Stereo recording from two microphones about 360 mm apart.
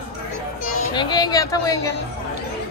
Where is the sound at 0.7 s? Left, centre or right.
Centre.